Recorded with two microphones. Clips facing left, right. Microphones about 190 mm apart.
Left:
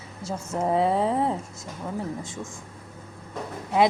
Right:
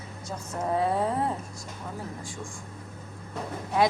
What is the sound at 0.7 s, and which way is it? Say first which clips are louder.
Speech: left 3 dB; 25° left (ahead or behind).